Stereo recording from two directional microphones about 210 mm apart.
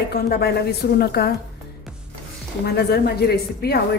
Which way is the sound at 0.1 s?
50° left (ahead or behind).